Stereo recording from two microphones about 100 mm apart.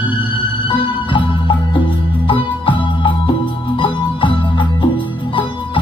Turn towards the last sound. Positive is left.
turn(degrees=55)  # may be behind; listen again after turning